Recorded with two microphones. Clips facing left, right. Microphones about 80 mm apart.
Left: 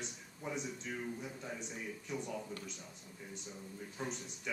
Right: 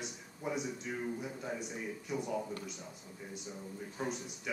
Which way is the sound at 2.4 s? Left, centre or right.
Right.